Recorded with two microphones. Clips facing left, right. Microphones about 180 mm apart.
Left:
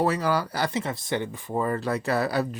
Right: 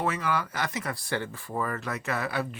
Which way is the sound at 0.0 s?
35° left (ahead or behind).